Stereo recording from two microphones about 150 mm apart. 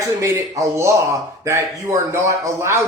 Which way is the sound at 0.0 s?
20° right (ahead or behind).